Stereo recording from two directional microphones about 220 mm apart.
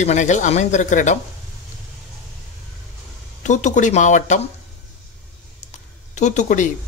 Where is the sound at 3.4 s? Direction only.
35° left (ahead or behind).